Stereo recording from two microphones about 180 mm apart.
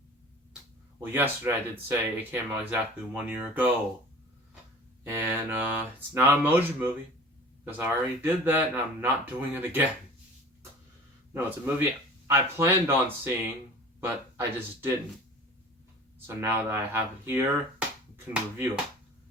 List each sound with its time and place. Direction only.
0.9 s speech: 10° right (ahead or behind)
5.0 s speech: 10° right (ahead or behind)
11.3 s speech: 10° right (ahead or behind)
16.2 s speech: 15° right (ahead or behind)